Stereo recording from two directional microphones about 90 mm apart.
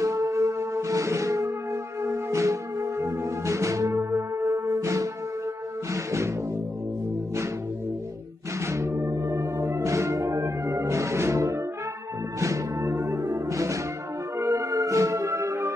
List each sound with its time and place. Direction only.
0.0 s music: 35° right (ahead or behind)
8.5 s music: 30° right (ahead or behind)